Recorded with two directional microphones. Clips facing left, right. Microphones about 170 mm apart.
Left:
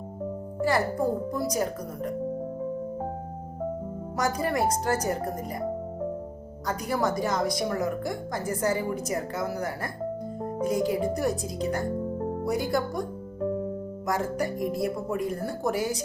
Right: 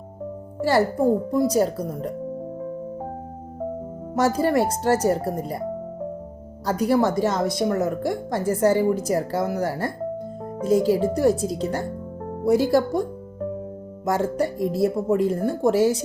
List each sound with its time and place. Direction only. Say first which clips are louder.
0.6 s speech: right 6 dB; 30° right (ahead or behind)
4.1 s speech: right 7 dB; 30° right (ahead or behind)
6.7 s speech: right 7 dB; 30° right (ahead or behind)